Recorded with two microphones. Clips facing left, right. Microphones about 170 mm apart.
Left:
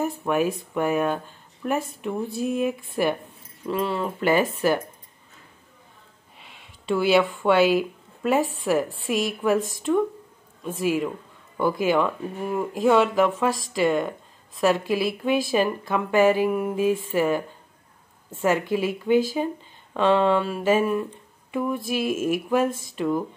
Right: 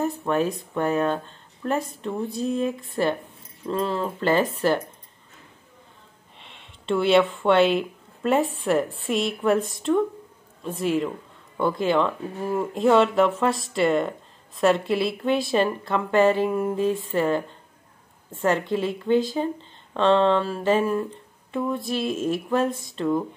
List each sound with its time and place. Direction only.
0.0 s speech: 5° left (ahead or behind)
6.4 s speech: 5° left (ahead or behind)